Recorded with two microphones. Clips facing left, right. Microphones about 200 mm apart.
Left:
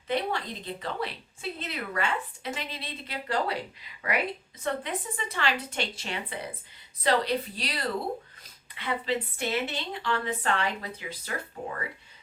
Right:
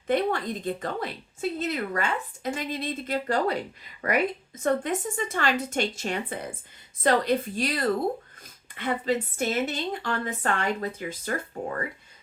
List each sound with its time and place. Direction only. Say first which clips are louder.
0.1 s a woman's voice: right 5 dB; 50° right (ahead or behind)